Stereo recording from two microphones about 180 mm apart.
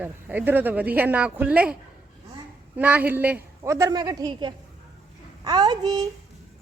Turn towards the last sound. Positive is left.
turn(degrees=-25)  # may be behind; listen again after turning